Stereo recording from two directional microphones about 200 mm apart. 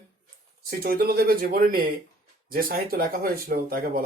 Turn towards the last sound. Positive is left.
turn(degrees=-45)  # may be behind; listen again after turning